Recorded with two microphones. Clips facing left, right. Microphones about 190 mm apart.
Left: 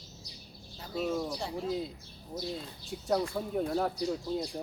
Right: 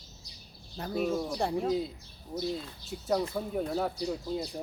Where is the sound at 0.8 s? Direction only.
55° right (ahead or behind).